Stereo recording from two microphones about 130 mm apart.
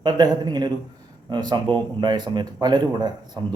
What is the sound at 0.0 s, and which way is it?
Speech, 30° right (ahead or behind).